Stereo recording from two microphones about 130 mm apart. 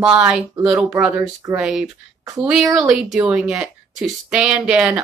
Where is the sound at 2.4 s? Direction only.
5° right (ahead or behind).